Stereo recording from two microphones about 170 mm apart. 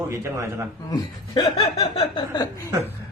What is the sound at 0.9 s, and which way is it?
Speech, 30° left (ahead or behind).